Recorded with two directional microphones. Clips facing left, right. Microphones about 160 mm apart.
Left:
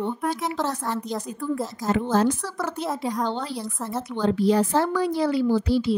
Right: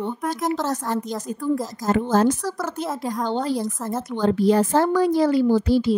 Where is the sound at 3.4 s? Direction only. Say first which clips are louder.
Right 6 dB; 45° right (ahead or behind).